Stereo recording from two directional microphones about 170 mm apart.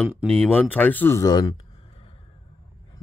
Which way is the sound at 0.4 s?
10° left (ahead or behind).